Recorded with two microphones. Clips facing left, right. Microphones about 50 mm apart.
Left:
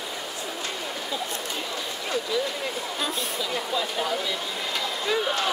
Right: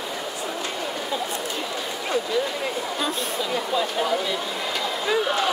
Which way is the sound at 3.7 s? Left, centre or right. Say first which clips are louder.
Right 4 dB; centre.